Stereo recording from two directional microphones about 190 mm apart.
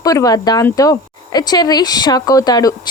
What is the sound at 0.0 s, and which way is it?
Speech, 20° left (ahead or behind).